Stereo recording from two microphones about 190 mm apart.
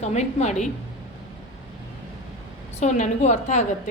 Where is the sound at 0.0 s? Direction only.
35° left (ahead or behind).